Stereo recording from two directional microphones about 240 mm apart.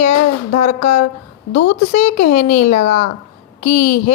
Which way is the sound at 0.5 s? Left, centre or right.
Left.